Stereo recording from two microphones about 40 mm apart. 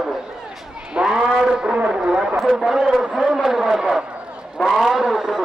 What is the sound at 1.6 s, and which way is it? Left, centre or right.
Brass instrument, right.